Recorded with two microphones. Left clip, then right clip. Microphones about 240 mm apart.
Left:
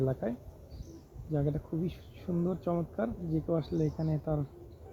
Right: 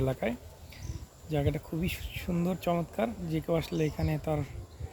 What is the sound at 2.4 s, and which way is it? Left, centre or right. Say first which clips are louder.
Speech: right 2 dB; centre.